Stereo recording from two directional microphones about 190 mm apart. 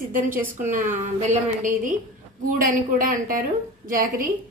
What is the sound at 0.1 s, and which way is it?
A woman's voice, 45° right (ahead or behind).